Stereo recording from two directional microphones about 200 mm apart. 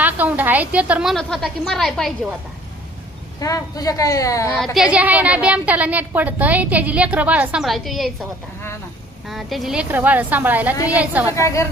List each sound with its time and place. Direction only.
0.0 s a woman's voice: 10° right (ahead or behind)
3.4 s speech: 15° left (ahead or behind)
4.5 s a woman's voice: centre (ahead or behind)
11.3 s speech: 15° left (ahead or behind)